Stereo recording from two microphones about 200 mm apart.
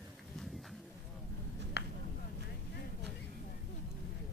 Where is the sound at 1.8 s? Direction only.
60° left (ahead or behind).